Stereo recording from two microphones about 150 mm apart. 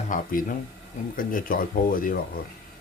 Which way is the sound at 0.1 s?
65° left (ahead or behind).